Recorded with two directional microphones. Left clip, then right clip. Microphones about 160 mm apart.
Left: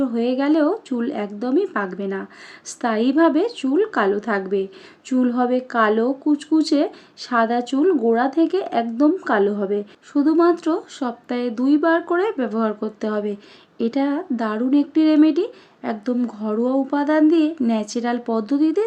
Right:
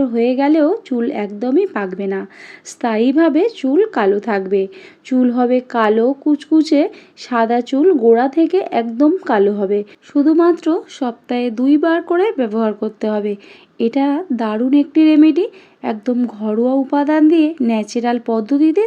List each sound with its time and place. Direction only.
0.0 s speech: 15° right (ahead or behind)